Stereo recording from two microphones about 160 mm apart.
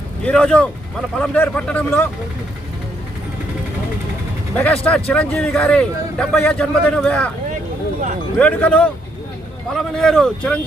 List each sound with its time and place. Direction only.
0.2 s a man's voice: 5° left (ahead or behind)
4.5 s a man's voice: 10° left (ahead or behind)
8.4 s a man's voice: 5° left (ahead or behind)